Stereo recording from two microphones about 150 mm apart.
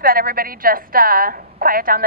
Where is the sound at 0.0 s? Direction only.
80° right.